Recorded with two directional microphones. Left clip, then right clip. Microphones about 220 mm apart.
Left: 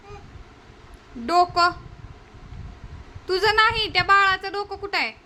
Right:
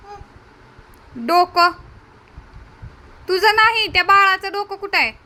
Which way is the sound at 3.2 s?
15° right (ahead or behind).